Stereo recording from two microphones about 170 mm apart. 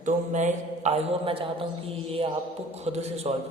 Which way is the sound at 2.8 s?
40° right (ahead or behind).